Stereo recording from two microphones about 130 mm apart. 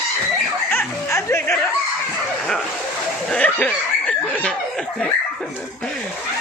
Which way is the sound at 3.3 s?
10° left (ahead or behind).